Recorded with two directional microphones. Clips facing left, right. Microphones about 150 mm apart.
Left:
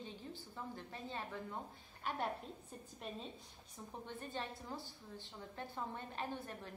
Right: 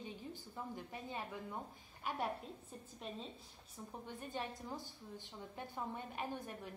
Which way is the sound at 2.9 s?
Centre (ahead or behind).